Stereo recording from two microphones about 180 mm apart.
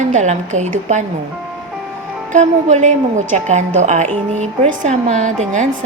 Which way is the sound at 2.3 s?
40° right (ahead or behind).